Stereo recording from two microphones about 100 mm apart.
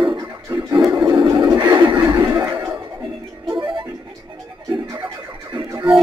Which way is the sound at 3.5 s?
55° right (ahead or behind).